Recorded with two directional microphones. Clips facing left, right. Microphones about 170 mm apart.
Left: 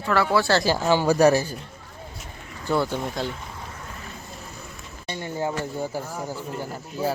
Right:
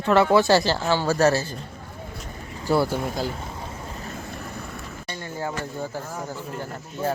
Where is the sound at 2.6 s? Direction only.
5° right (ahead or behind).